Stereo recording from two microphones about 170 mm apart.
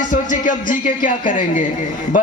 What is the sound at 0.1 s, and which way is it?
Music, 50° left (ahead or behind).